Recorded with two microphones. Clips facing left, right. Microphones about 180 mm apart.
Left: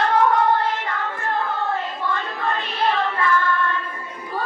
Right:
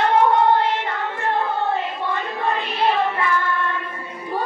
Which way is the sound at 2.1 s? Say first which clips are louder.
Right 2 dB; 20° right (ahead or behind).